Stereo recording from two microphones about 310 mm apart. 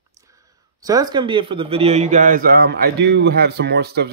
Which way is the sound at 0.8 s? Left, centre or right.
Centre.